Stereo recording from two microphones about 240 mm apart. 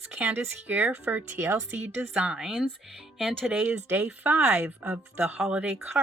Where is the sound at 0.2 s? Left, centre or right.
Centre.